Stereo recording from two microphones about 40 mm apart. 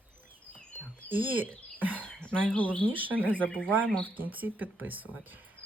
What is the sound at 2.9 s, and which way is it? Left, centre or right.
Speech, right.